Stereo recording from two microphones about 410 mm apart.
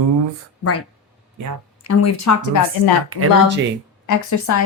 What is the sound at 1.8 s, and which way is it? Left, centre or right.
Speech, left.